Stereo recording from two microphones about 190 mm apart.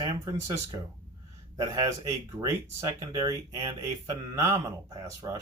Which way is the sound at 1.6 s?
20° right (ahead or behind).